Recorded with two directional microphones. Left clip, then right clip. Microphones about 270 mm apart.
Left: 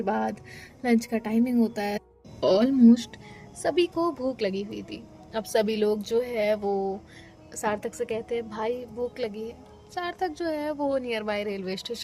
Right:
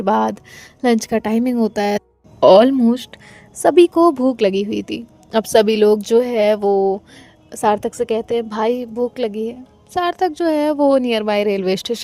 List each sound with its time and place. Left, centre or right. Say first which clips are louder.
0.0 s a woman's voice: right 11 dB; right